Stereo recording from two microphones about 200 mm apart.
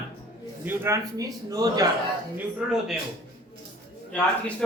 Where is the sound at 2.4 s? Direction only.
5° right (ahead or behind).